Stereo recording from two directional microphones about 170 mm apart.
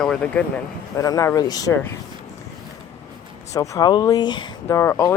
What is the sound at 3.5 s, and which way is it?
Speech, 25° left (ahead or behind).